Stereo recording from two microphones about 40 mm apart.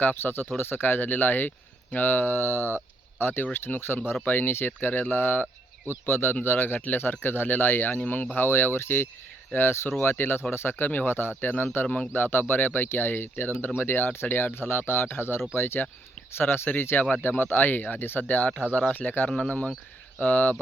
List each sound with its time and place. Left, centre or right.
0.0 s speech: left
4.3 s speech: left
10.5 s speech: left
12.1 s speech: left
12.9 s speech: left
14.5 s speech: left
17.0 s speech: left
19.4 s speech: left
20.2 s speech: left